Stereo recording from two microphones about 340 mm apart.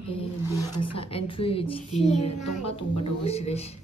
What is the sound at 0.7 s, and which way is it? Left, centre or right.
A woman's voice, centre.